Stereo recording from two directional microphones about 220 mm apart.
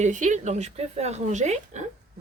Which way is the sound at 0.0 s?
35° right (ahead or behind).